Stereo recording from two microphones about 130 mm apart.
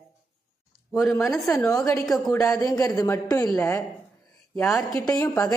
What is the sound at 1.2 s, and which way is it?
Speech, centre (ahead or behind).